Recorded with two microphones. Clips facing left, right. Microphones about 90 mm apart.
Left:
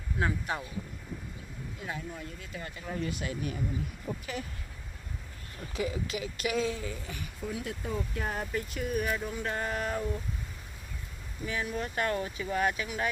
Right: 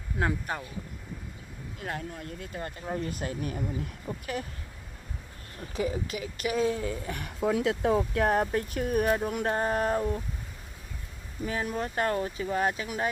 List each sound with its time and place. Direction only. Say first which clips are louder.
0.2 s speech: right 2 dB; 40° right (ahead or behind)
1.8 s speech: right 3 dB; 60° right (ahead or behind); by 3.6 s 45° right (ahead or behind)
4.1 s speech: left 1 dB; 55° right (ahead or behind)
5.5 s speech: right 3 dB; 40° right (ahead or behind)
11.4 s speech: right 3 dB; 35° right (ahead or behind)